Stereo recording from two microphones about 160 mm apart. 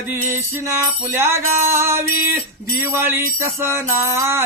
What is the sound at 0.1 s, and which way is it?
Music, 15° right (ahead or behind).